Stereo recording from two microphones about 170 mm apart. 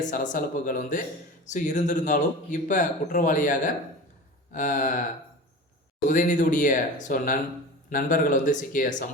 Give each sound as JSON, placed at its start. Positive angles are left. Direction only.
{"t": 0.0, "sound": "speech", "side_deg": 50}
{"t": 6.1, "sound": "speech", "side_deg": 50}